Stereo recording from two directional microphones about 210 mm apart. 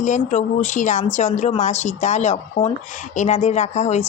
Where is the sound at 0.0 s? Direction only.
35° left (ahead or behind).